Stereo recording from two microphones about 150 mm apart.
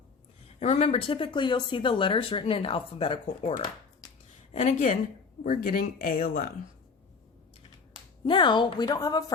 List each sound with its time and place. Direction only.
0.4 s speech: 45° left (ahead or behind)
4.5 s speech: 50° left (ahead or behind)
5.4 s speech: 65° left (ahead or behind)
8.2 s speech: 35° left (ahead or behind)